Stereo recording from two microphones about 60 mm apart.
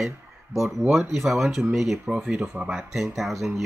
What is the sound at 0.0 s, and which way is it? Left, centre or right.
Speech, centre.